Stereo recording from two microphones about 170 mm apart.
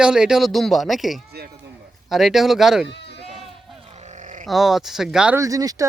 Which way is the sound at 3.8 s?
40° right (ahead or behind).